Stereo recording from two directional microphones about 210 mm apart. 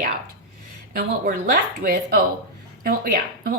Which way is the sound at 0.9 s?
45° right (ahead or behind).